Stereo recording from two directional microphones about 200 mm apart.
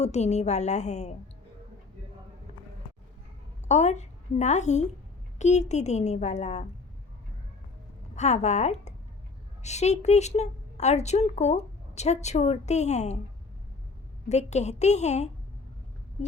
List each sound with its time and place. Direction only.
0.0 s speech: 35° left (ahead or behind)
3.7 s a woman's voice: 35° left (ahead or behind)
8.1 s speech: 35° left (ahead or behind)
14.3 s speech: 35° left (ahead or behind)